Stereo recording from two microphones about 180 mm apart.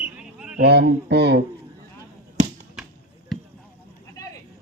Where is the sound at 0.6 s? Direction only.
65° right (ahead or behind).